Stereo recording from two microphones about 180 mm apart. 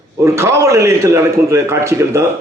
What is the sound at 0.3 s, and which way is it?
A man's voice, 15° right (ahead or behind).